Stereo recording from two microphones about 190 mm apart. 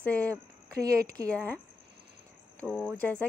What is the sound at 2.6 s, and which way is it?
Speech, 5° left (ahead or behind).